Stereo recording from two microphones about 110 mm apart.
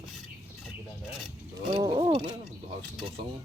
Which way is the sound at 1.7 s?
40° right (ahead or behind).